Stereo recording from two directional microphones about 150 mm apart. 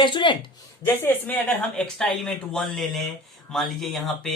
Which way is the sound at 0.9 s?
15° left (ahead or behind).